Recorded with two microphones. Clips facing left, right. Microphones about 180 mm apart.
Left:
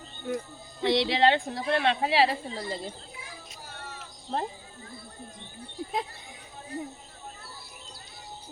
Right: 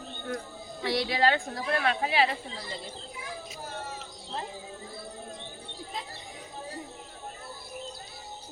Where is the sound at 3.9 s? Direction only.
50° left (ahead or behind).